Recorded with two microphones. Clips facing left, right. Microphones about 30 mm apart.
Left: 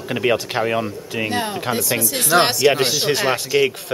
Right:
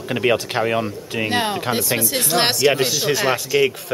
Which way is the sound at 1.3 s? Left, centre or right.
Right.